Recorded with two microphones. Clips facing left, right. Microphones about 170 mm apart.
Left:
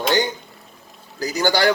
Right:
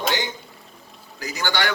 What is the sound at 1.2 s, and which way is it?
Speech, 40° left (ahead or behind).